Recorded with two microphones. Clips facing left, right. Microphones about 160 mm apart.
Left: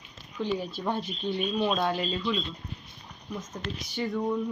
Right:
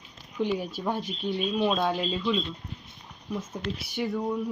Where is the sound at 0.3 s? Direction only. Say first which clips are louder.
Right 2 dB; 15° right (ahead or behind).